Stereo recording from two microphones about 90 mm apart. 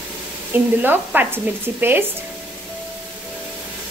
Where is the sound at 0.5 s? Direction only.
20° right (ahead or behind).